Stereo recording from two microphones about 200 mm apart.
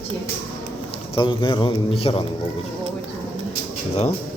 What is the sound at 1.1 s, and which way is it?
A man's voice, 25° left (ahead or behind).